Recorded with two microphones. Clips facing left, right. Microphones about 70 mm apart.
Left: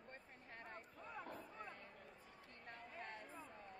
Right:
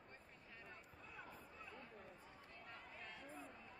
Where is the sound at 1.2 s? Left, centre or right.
Left.